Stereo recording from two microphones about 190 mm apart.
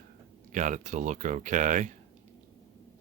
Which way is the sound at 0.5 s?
40° right (ahead or behind).